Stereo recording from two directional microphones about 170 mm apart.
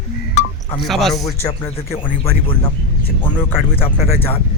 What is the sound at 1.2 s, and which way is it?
Speech, 20° left (ahead or behind).